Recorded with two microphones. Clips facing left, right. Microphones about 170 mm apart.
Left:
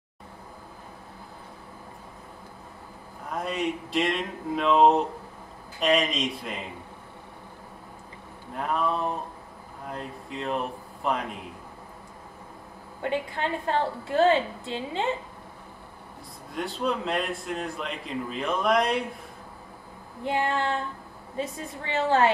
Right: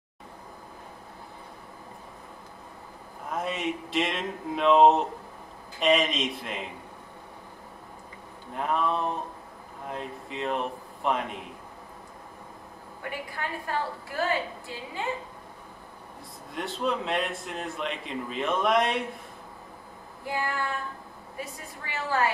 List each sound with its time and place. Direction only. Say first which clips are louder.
3.3 s a man's voice: left 1 dB; centre (ahead or behind)
8.5 s a man's voice: even; centre (ahead or behind)
13.0 s a woman's voice: left 7 dB; 25° left (ahead or behind)
16.5 s a man's voice: left 1 dB; centre (ahead or behind)
20.2 s a woman's voice: left 5 dB; 25° left (ahead or behind)